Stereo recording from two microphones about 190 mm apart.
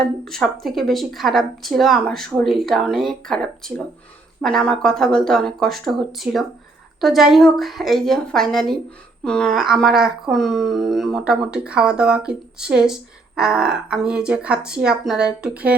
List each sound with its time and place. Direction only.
0.0 s a woman's voice: centre (ahead or behind)